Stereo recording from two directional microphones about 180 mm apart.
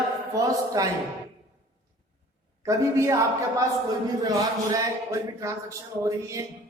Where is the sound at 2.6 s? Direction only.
15° right (ahead or behind).